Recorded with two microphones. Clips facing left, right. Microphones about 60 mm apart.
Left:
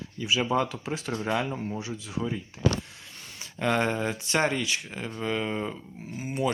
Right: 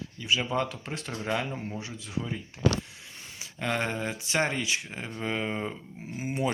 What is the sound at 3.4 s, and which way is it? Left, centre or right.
Speech, centre.